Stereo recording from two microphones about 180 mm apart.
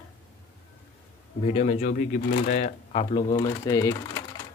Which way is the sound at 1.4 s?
35° left (ahead or behind).